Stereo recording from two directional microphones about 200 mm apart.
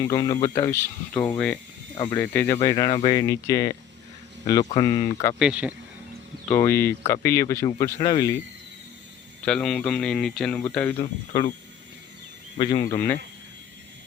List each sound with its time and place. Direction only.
0.0 s speech: 20° left (ahead or behind)
5.4 s speech: 5° right (ahead or behind)
6.5 s speech: 15° left (ahead or behind)
9.4 s speech: 5° left (ahead or behind)
10.9 s speech: 25° left (ahead or behind)
12.5 s speech: 25° left (ahead or behind)